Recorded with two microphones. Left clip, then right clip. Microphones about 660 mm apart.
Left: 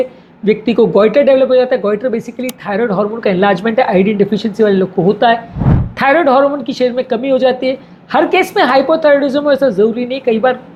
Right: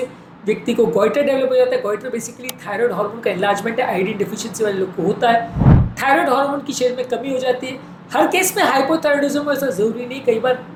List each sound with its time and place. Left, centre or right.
0.4 s a woman's voice: left
5.5 s a sound: centre
6.0 s a woman's voice: left